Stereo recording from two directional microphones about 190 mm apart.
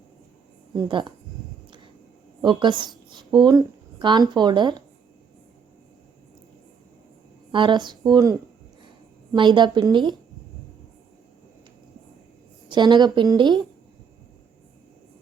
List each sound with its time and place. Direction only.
0.9 s speech: 25° right (ahead or behind)
2.4 s speech: 25° right (ahead or behind)
7.5 s speech: 25° right (ahead or behind)
12.6 s a woman's voice: 25° right (ahead or behind)